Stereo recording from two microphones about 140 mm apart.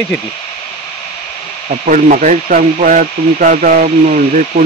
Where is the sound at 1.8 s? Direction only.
65° right (ahead or behind).